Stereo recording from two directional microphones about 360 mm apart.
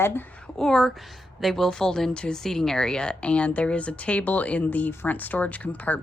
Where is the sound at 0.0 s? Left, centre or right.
Centre.